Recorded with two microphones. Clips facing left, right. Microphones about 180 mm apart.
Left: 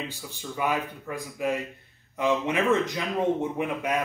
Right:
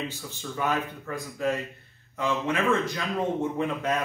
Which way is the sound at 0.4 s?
10° left (ahead or behind).